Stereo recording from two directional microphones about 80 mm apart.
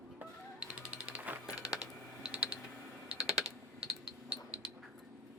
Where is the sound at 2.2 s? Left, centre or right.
Centre.